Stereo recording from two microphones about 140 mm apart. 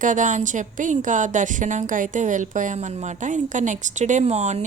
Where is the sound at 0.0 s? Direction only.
65° right (ahead or behind).